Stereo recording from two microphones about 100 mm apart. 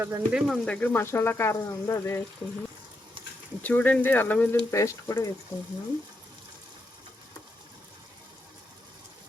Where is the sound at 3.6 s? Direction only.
15° left (ahead or behind).